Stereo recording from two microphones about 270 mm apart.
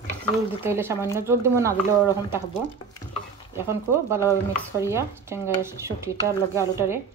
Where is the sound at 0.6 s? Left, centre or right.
Centre.